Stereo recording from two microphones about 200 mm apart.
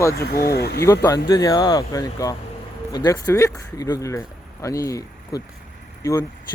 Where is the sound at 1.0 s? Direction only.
20° left (ahead or behind).